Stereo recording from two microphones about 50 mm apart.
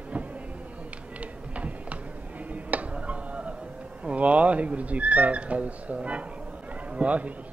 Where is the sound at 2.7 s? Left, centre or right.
Right.